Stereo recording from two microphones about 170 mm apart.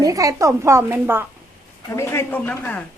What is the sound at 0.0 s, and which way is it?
Speech, 20° right (ahead or behind).